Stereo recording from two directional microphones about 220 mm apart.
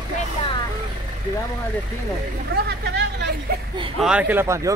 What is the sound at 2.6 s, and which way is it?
Speech, 50° right (ahead or behind).